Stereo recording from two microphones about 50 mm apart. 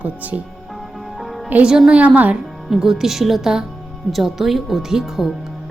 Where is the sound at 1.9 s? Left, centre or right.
Right.